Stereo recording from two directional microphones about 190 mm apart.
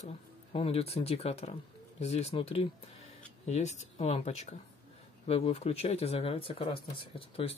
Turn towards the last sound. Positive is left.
turn(degrees=30)  # may be behind; listen again after turning